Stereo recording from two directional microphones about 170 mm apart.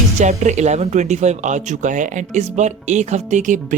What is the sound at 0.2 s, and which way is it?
Speech, 45° right (ahead or behind).